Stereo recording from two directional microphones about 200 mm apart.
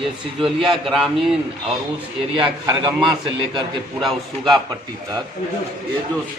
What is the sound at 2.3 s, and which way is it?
A man's voice, 20° right (ahead or behind).